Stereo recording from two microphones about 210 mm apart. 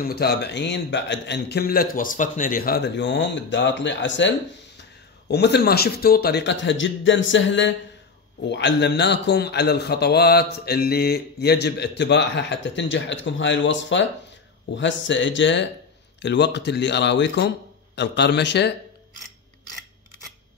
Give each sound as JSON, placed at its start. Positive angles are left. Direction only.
{"t": 0.0, "sound": "a man's voice", "side_deg": 50}
{"t": 5.3, "sound": "a man's voice", "side_deg": 50}